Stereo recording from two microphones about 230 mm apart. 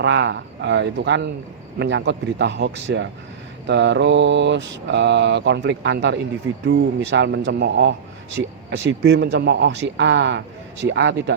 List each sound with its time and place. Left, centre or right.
0.0 s speech: right